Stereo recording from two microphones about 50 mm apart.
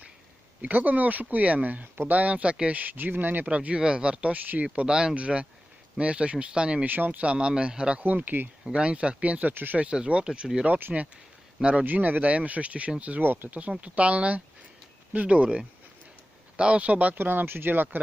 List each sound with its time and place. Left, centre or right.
0.6 s speech: right
3.5 s speech: right
6.8 s speech: right
7.2 s speech: right
8.0 s speech: right
8.6 s speech: right
9.7 s speech: right
10.7 s speech: right
11.6 s speech: centre
11.9 s speech: right
16.6 s speech: right
17.2 s speech: right